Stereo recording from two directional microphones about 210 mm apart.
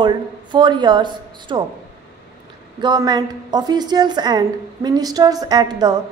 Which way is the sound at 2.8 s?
20° right (ahead or behind).